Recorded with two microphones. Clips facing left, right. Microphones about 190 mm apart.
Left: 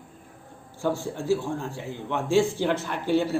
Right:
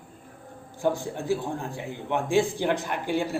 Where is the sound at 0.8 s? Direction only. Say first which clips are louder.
Even; 15° right (ahead or behind).